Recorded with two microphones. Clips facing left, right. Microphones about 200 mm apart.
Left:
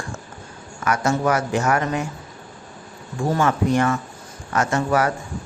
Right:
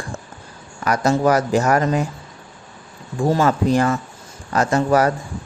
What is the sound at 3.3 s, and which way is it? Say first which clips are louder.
Speech: right 1 dB; 35° right (ahead or behind).